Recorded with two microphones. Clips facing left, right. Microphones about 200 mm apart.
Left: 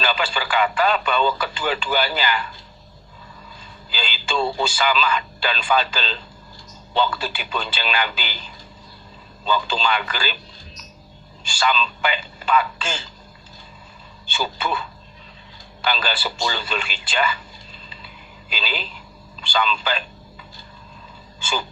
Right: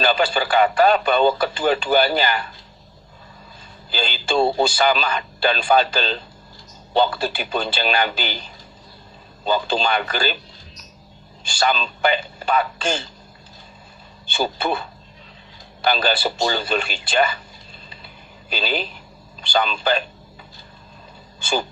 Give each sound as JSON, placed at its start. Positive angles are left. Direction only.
{"t": 0.0, "sound": "speech", "side_deg": -40}
{"t": 3.9, "sound": "speech", "side_deg": -40}
{"t": 9.4, "sound": "a man's voice", "side_deg": -45}
{"t": 11.6, "sound": "speech", "side_deg": -40}
{"t": 14.3, "sound": "a man's voice", "side_deg": -45}
{"t": 18.5, "sound": "a man's voice", "side_deg": -45}